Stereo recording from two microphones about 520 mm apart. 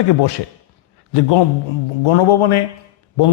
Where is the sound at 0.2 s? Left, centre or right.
Left.